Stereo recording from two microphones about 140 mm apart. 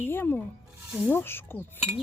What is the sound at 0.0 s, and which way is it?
Speech, 15° left (ahead or behind).